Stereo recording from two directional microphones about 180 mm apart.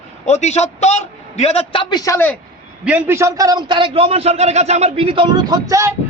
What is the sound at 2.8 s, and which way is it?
A man's voice, 10° right (ahead or behind).